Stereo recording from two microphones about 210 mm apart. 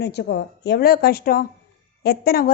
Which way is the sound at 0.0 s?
55° left (ahead or behind).